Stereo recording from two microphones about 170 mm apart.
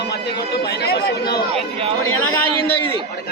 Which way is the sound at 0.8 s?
65° left (ahead or behind).